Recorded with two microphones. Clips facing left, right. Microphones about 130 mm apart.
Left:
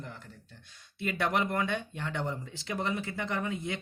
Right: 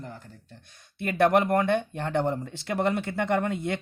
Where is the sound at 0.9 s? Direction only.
55° right (ahead or behind).